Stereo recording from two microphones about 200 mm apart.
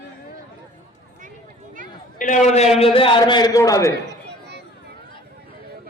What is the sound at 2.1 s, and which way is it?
A man's voice, 40° left (ahead or behind).